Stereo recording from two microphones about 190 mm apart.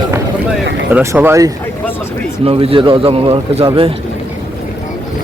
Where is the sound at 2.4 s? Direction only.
30° right (ahead or behind).